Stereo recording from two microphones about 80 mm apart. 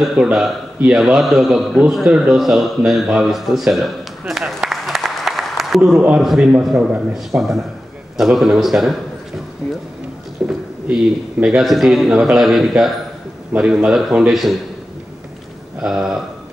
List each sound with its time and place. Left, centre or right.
0.0 s a man's voice: centre
10.4 s speech: centre
11.4 s a man's voice: centre
15.8 s a man's voice: centre